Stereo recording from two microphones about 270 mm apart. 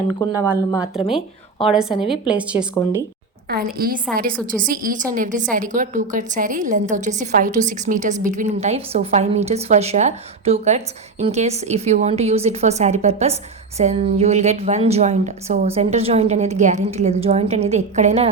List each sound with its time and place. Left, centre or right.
0.3 s a woman's voice: centre
3.5 s a woman's voice: right